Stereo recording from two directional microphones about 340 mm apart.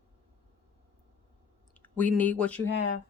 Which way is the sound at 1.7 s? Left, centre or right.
Centre.